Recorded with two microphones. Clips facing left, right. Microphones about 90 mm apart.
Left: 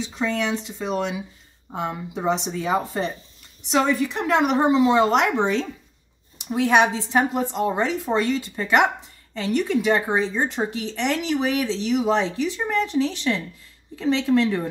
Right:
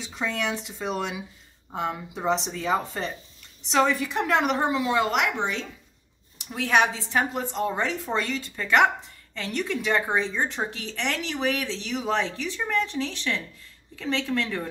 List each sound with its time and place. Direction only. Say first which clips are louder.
0.0 s speech: left 4 dB; 5° right (ahead or behind); by 3.2 s 15° left (ahead or behind)
3.7 s speech: left 2 dB; 5° left (ahead or behind)
4.5 s speech: left 6 dB; 20° left (ahead or behind); by 5.7 s 35° left (ahead or behind)
6.5 s a woman's voice: left 4 dB; 20° left (ahead or behind)